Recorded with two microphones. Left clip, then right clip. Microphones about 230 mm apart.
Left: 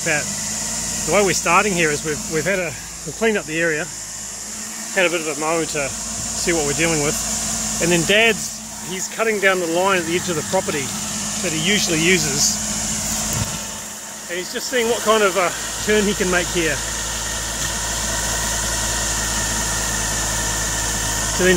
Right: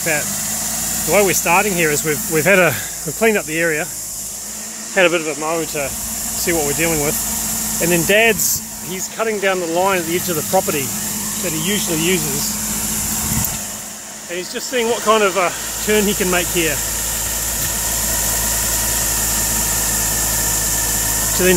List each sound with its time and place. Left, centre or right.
1.1 s speech: centre
2.0 s speech: right
3.2 s speech: centre
5.0 s speech: right
5.4 s speech: centre
6.4 s speech: centre
14.3 s speech: centre
17.6 s vehicle: centre